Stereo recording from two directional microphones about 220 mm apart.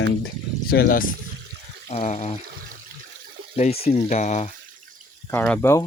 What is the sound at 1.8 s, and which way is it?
Speech, 30° left (ahead or behind).